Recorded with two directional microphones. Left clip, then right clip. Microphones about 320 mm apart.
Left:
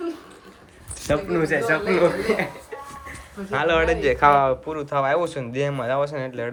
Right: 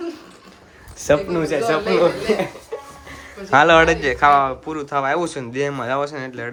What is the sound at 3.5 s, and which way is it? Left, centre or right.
Speech, centre.